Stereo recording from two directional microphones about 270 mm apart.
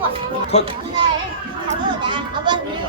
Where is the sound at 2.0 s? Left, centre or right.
Centre.